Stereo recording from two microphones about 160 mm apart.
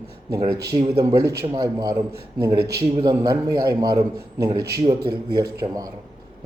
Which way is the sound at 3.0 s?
25° right (ahead or behind).